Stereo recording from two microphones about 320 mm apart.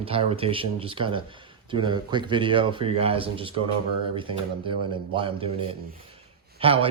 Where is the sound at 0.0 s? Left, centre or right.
Centre.